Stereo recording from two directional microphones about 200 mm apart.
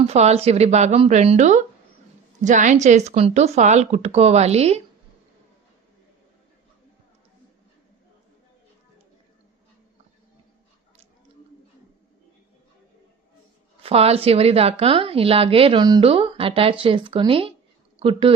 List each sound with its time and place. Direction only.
0.0 s speech: 30° right (ahead or behind)
13.8 s a woman's voice: 30° right (ahead or behind)